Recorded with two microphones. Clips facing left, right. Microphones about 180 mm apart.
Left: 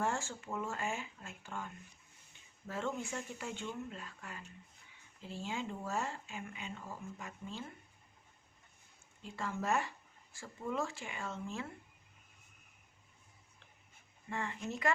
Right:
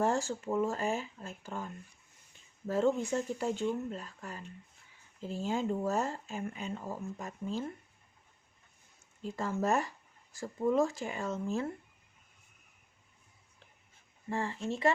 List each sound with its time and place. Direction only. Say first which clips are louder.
0.0 s speech: right 7 dB; 35° right (ahead or behind)
9.2 s speech: right 6 dB; 40° right (ahead or behind)
14.3 s speech: right 6 dB; 35° right (ahead or behind)